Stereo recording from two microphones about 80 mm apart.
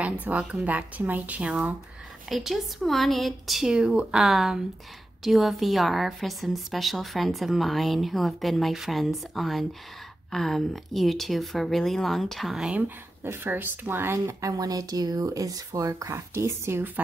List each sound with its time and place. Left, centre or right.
0.0 s a woman's voice: centre
2.2 s a woman's voice: centre
12.7 s speech: right